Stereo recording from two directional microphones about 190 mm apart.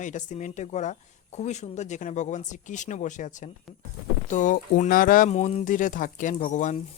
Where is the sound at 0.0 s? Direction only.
40° left (ahead or behind).